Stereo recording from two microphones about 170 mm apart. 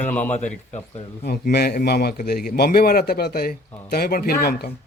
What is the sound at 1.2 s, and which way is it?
A man's voice, 70° left (ahead or behind).